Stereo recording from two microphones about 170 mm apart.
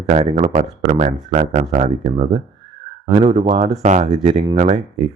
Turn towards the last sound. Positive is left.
turn(degrees=-40)  # may be behind; listen again after turning